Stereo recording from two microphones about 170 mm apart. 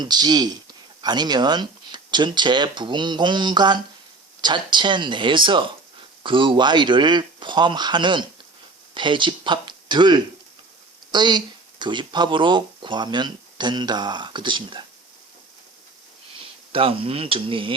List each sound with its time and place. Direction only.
0.0 s speech: 25° right (ahead or behind)
16.7 s speech: 30° right (ahead or behind)